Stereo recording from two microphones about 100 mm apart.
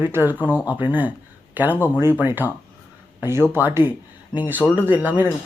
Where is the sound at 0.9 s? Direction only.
15° right (ahead or behind).